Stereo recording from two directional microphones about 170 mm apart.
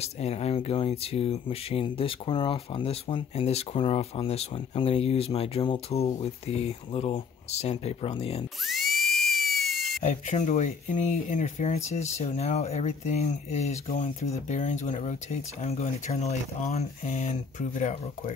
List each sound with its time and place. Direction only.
0.0 s speech: 40° left (ahead or behind)
8.6 s a sound: centre (ahead or behind)
10.0 s speech: 40° left (ahead or behind)